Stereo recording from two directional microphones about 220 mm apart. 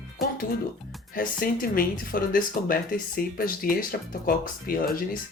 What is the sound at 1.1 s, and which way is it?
Speech, 40° left (ahead or behind).